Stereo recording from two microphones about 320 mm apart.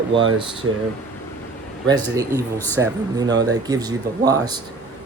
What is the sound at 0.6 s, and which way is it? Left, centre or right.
Speech, right.